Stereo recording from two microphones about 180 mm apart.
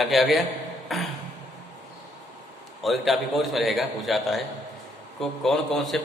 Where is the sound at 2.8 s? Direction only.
Centre (ahead or behind).